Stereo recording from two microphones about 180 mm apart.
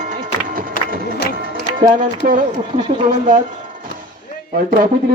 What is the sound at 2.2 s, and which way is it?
Speech, 50° right (ahead or behind).